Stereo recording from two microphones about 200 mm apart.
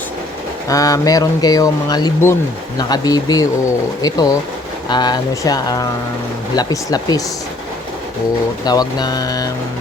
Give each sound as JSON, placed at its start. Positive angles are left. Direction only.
{"t": 0.7, "sound": "speech", "side_deg": 15}
{"t": 8.6, "sound": "speech", "side_deg": 20}